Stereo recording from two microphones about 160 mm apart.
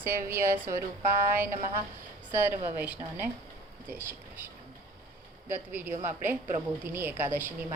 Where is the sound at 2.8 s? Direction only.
10° right (ahead or behind).